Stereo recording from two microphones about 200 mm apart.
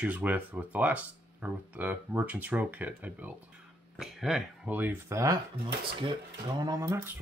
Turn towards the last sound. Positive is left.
turn(degrees=-15)  # may be behind; listen again after turning